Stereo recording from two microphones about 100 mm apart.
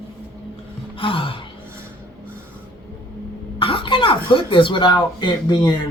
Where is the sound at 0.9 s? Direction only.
60° left (ahead or behind).